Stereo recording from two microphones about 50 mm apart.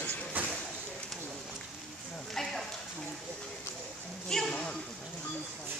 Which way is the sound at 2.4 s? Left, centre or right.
Centre.